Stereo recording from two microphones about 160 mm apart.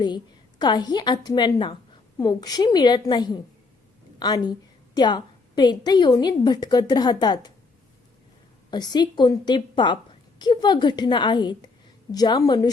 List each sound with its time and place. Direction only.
0.6 s a woman's voice: 25° left (ahead or behind)
8.7 s a woman's voice: 25° left (ahead or behind)